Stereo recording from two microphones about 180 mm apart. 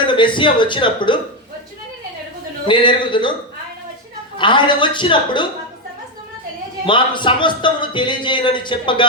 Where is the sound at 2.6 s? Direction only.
25° left (ahead or behind).